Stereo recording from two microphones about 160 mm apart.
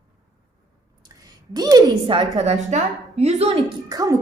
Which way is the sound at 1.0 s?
25° right (ahead or behind).